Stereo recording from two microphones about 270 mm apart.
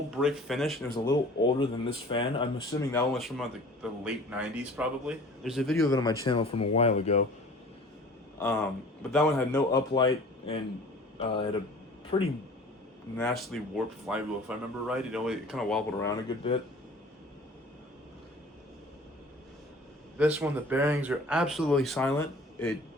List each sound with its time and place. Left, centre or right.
0.2 s speech: centre
1.0 s speech: centre
2.9 s speech: centre
5.9 s speech: centre
8.4 s a sound: centre
9.0 s speech: centre
9.7 s speech: centre
13.1 s speech: centre
16.0 s speech: centre
20.1 s speech: centre